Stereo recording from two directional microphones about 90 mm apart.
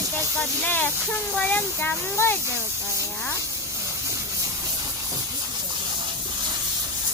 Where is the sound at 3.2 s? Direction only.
30° left (ahead or behind).